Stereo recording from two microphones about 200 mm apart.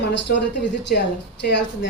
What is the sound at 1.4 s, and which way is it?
Speech, 60° left (ahead or behind).